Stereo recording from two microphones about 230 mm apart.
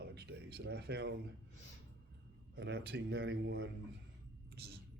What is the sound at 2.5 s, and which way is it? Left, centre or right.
A man's voice, right.